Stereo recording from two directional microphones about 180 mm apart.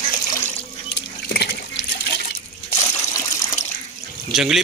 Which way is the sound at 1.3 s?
60° left (ahead or behind).